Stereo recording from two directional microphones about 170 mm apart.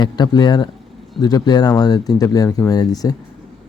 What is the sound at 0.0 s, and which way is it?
Speech, 25° left (ahead or behind).